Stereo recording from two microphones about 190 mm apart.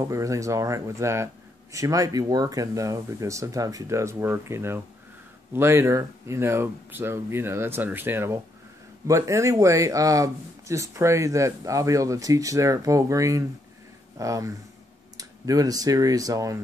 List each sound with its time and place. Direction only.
0.0 s speech: 15° right (ahead or behind)